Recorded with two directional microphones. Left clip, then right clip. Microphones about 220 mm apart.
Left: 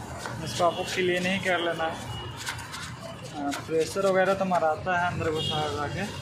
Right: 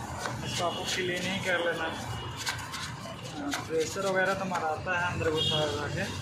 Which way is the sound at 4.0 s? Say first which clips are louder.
Left 6 dB; 50° left (ahead or behind).